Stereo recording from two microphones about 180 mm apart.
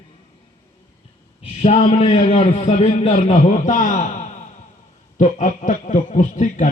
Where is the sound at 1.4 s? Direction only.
35° left (ahead or behind).